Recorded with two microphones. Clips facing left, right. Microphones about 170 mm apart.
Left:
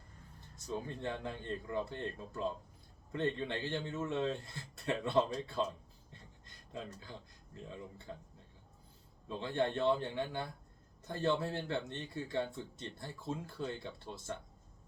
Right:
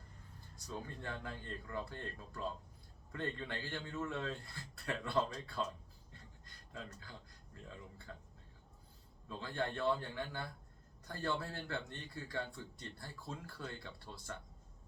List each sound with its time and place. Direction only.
0.5 s speech: 20° left (ahead or behind)
6.7 s speech: 20° left (ahead or behind)
9.3 s speech: 20° left (ahead or behind)